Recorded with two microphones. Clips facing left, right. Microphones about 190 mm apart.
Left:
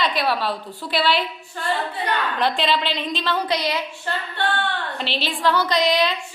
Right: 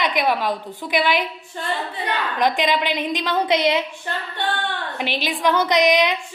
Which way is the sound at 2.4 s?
15° right (ahead or behind).